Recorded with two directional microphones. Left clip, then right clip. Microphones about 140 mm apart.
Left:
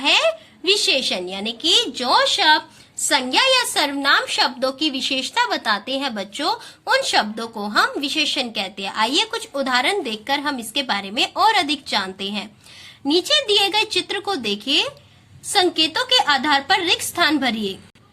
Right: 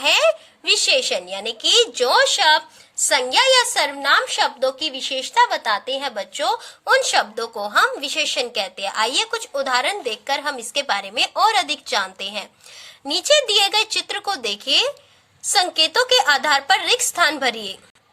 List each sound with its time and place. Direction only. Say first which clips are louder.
0.0 s a woman's voice: right 1 dB; 50° right (ahead or behind)